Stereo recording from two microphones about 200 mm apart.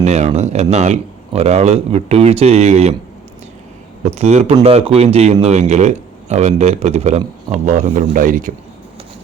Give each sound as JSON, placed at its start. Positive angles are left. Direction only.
{"t": 0.0, "sound": "a sound", "side_deg": -35}
{"t": 0.3, "sound": "speech", "side_deg": -35}
{"t": 4.0, "sound": "speech", "side_deg": -30}